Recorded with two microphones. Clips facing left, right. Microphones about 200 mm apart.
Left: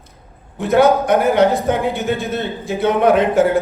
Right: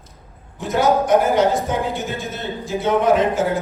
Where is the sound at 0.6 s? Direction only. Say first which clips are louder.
Left 5 dB; 60° left (ahead or behind).